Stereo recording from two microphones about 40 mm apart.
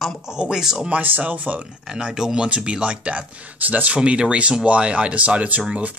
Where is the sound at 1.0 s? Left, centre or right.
Right.